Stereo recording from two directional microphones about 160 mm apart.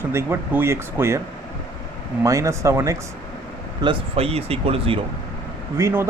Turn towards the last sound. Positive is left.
turn(degrees=-15)  # may be behind; listen again after turning